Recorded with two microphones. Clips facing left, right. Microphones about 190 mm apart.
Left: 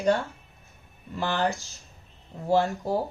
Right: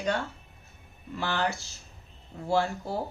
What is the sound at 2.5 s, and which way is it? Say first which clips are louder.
Speech: left 4 dB; 40° left (ahead or behind).